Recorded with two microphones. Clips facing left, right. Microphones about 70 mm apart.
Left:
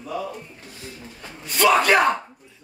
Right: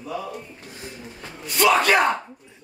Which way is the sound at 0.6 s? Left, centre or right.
Right.